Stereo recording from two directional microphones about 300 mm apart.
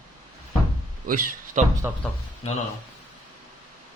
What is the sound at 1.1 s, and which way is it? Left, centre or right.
Mantra, right.